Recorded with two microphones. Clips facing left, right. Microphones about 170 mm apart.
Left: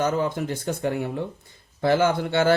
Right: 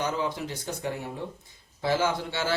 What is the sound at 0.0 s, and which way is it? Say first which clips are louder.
Speech: left 6 dB; 50° left (ahead or behind).